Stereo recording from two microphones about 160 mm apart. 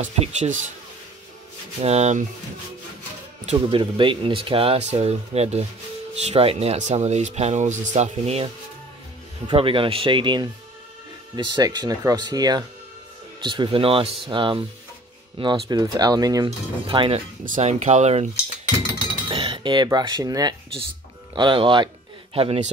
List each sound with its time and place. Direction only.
0.0 s speech: 45° right (ahead or behind)
1.8 s speech: 45° right (ahead or behind)
3.4 s speech: 30° right (ahead or behind)
9.5 s speech: 35° right (ahead or behind)
17.6 s speech: 45° right (ahead or behind)
19.2 s speech: 30° right (ahead or behind)